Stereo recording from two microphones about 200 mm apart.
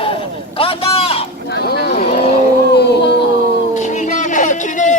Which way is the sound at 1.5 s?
55° left (ahead or behind).